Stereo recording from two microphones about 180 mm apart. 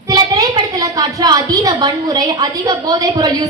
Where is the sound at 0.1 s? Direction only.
20° right (ahead or behind).